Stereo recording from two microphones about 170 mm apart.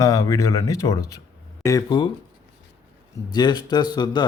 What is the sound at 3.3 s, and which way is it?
Speech, 25° left (ahead or behind).